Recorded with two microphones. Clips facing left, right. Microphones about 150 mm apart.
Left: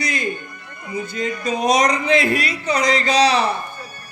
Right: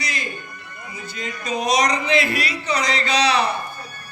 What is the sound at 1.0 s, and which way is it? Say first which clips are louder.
A man's voice: left 5 dB; 45° left (ahead or behind).